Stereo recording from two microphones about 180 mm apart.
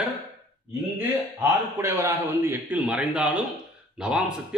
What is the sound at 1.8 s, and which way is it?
A man's voice, 15° right (ahead or behind).